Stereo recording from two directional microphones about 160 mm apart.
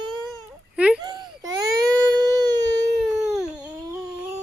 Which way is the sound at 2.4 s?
25° right (ahead or behind).